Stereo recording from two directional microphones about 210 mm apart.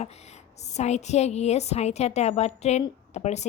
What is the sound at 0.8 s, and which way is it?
A woman's voice, 35° left (ahead or behind).